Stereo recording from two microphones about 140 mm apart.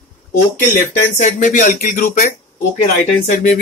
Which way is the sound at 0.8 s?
60° left (ahead or behind).